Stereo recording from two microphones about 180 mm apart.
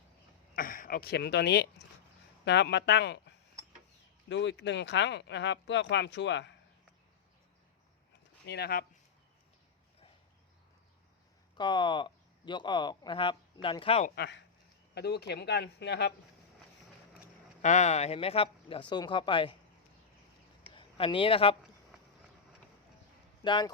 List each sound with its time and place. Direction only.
0.5 s speech: 50° left (ahead or behind); by 6.5 s 80° left
8.4 s speech: 65° left (ahead or behind)
11.5 s speech: 25° left (ahead or behind)
14.2 s speech: 80° left
14.9 s speech: 65° left (ahead or behind)
17.6 s speech: 40° left (ahead or behind)
20.7 s speech: 30° left (ahead or behind)
23.4 s speech: 25° left (ahead or behind)